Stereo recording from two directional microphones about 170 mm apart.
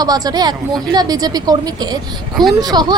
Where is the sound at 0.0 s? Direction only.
20° right (ahead or behind).